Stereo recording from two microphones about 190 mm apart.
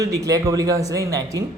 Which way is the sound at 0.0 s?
20° right (ahead or behind).